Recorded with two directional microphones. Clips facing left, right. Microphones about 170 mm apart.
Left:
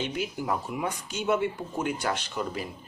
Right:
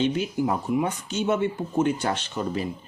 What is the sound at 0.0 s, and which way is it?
Speech, 25° right (ahead or behind).